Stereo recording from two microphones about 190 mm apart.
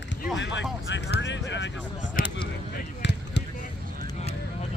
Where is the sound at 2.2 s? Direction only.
45° left (ahead or behind).